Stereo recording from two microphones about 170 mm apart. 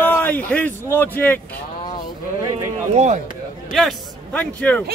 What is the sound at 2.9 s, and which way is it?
Speech, 45° right (ahead or behind).